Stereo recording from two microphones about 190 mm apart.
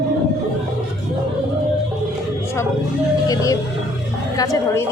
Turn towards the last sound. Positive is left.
turn(degrees=20)  # may be behind; listen again after turning